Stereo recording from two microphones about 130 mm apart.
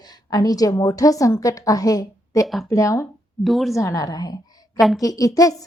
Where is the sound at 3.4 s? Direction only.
Centre (ahead or behind).